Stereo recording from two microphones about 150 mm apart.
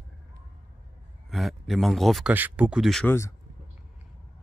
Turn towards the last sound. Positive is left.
turn(degrees=15)  # may be behind; listen again after turning